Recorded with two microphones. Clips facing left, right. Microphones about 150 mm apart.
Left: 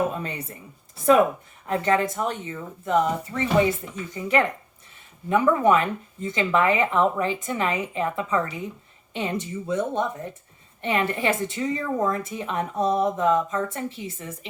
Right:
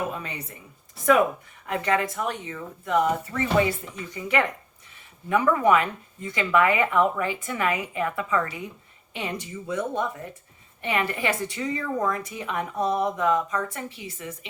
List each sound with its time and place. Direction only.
0.1 s a sound: 35° left (ahead or behind)
1.6 s speech: 35° left (ahead or behind)
3.3 s speech: 20° left (ahead or behind)
4.1 s speech: 35° left (ahead or behind)